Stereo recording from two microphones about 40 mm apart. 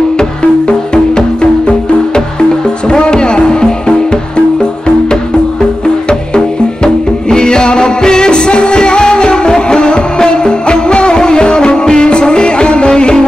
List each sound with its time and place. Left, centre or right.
0.2 s music: centre